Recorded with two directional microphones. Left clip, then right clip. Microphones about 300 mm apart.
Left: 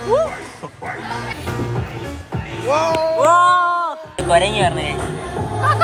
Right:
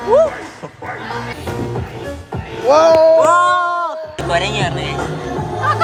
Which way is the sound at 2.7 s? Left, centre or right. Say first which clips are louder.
Right 8 dB; right.